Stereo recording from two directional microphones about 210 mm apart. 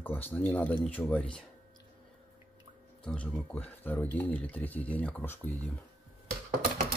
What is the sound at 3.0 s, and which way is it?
Speech, 5° left (ahead or behind).